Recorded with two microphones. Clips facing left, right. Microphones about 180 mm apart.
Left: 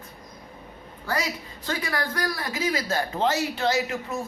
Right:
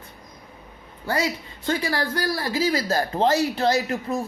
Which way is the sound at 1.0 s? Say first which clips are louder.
Right 4 dB; 30° right (ahead or behind).